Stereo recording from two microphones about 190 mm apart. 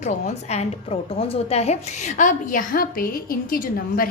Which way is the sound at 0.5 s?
30° left (ahead or behind).